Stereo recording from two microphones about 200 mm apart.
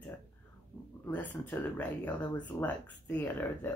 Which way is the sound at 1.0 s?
10° left (ahead or behind).